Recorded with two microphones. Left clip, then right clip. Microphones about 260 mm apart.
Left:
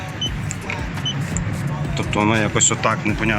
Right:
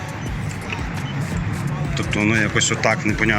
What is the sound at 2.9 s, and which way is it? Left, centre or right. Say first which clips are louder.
Speech: right 2 dB; centre.